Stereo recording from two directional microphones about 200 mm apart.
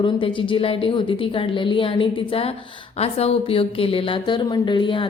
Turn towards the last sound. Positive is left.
turn(degrees=20)  # may be behind; listen again after turning